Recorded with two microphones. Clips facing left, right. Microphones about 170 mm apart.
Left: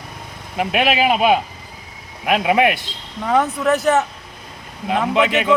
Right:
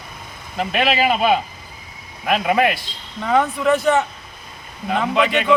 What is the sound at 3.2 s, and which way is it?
Speech, centre (ahead or behind).